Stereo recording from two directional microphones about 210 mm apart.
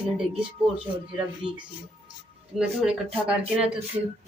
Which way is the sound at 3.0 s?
30° right (ahead or behind).